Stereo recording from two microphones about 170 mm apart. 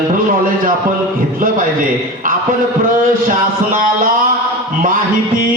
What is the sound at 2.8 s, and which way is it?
A man's voice, 50° right (ahead or behind).